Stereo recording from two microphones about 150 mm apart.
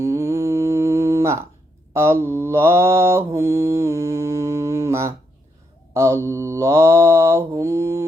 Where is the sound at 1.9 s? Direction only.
20° right (ahead or behind).